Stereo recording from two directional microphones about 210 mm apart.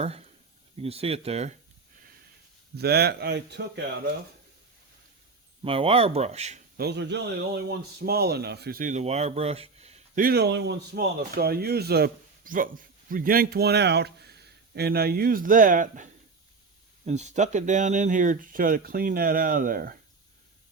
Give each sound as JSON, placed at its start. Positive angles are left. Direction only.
{"t": 0.0, "sound": "a sound", "side_deg": -30}
{"t": 0.8, "sound": "speech", "side_deg": -30}
{"t": 2.7, "sound": "speech", "side_deg": -50}
{"t": 5.6, "sound": "speech", "side_deg": -25}
{"t": 6.7, "sound": "speech", "side_deg": -50}
{"t": 10.2, "sound": "speech", "side_deg": -50}
{"t": 17.1, "sound": "speech", "side_deg": -35}